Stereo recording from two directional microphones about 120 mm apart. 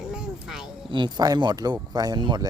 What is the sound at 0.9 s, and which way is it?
Speech, 40° right (ahead or behind).